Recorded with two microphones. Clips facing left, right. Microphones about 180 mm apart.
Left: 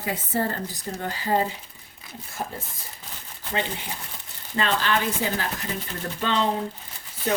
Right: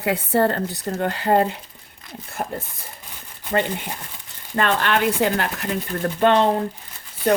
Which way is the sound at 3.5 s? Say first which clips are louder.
Right 6 dB; 55° right (ahead or behind).